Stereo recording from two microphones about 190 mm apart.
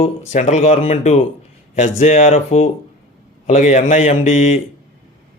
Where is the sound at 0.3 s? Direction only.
35° left (ahead or behind).